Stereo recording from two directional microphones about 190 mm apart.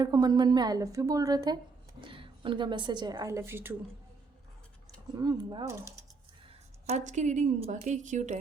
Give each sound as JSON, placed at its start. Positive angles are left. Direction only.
{"t": 0.0, "sound": "a woman's voice", "side_deg": -20}
{"t": 5.1, "sound": "a woman's voice", "side_deg": -20}
{"t": 6.8, "sound": "speech", "side_deg": -40}